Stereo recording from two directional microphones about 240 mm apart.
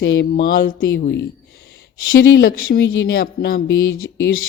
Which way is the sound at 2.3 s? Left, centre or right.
Left.